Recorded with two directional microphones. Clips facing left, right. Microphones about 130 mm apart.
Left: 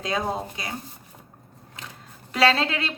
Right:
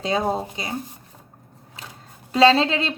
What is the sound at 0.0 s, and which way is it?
Speech, 25° right (ahead or behind).